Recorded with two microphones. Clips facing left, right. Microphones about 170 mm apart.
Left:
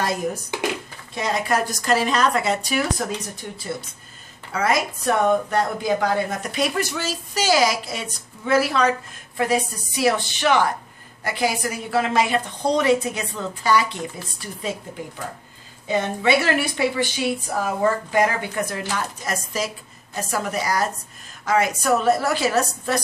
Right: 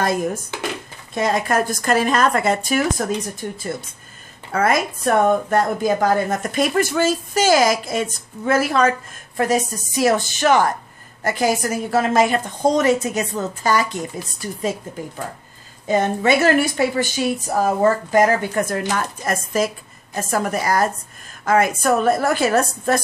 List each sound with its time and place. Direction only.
0.0 s a woman's voice: 50° right (ahead or behind)
15.9 s a woman's voice: 45° right (ahead or behind)